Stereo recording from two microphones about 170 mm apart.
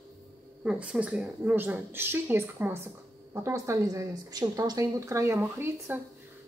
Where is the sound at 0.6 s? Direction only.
5° right (ahead or behind).